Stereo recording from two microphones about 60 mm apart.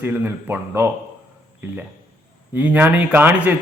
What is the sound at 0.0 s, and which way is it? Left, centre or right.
Speech, right.